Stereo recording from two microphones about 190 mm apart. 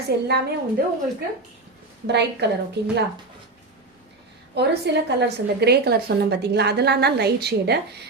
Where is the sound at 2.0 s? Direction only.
60° right (ahead or behind).